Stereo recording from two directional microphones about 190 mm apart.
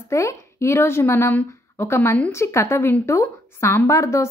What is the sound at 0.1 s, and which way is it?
A woman's voice, 15° left (ahead or behind).